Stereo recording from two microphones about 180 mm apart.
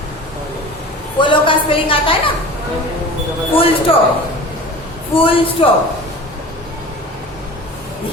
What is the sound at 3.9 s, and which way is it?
Speech, 30° left (ahead or behind).